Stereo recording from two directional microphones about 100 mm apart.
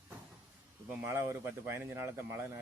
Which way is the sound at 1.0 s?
25° right (ahead or behind).